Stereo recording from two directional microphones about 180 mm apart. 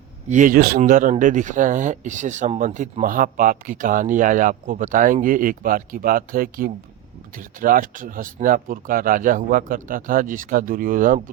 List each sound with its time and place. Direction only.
0.3 s speech: 45° right (ahead or behind)